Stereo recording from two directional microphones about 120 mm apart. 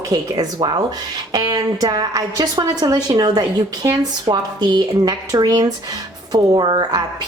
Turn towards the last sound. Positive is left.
turn(degrees=-35)  # may be behind; listen again after turning